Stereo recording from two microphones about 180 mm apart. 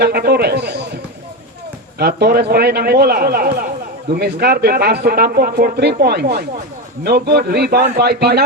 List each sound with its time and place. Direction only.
0.0 s a man's voice: 60° right (ahead or behind)
2.0 s speech: 60° right (ahead or behind)